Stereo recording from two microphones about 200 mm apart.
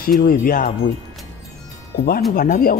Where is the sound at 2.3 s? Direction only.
45° left (ahead or behind).